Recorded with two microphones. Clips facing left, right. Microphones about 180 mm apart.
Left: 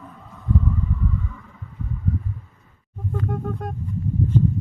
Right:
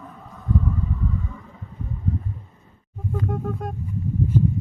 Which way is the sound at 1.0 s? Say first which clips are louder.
Even; 20° right (ahead or behind).